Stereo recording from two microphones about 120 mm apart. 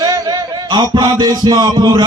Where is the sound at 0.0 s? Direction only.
30° right (ahead or behind).